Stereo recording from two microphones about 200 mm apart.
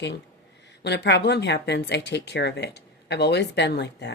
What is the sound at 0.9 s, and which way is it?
Speech, 60° left (ahead or behind).